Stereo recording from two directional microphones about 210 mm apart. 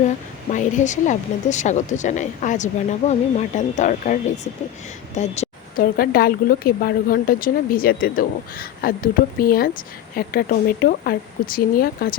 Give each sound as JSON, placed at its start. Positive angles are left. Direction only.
{"t": 0.5, "sound": "speech", "side_deg": 35}
{"t": 5.1, "sound": "a sound", "side_deg": 30}
{"t": 5.8, "sound": "a woman's voice", "side_deg": 45}